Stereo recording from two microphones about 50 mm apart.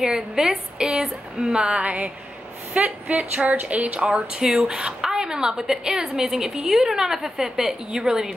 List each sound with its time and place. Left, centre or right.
0.0 s speech: centre
1.8 s speech: right
4.0 s speech: centre